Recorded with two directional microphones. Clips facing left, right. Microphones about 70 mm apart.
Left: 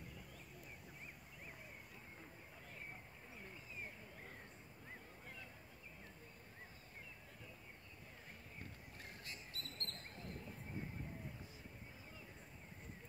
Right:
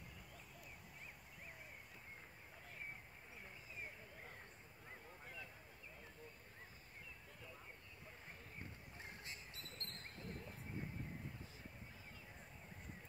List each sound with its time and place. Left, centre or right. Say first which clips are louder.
9.0 s bird: even; right